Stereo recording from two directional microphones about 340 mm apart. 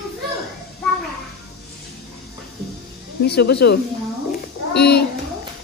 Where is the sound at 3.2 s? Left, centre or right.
Left.